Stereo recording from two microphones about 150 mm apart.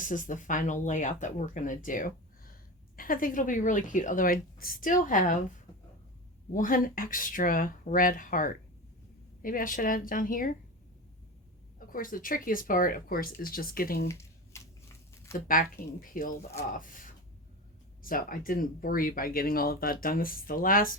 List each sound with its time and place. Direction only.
0.0 s speech: 60° left (ahead or behind)
6.5 s speech: 65° left (ahead or behind)
11.9 s speech: 65° left (ahead or behind)
14.1 s a sound: 20° left (ahead or behind)
15.3 s speech: 80° left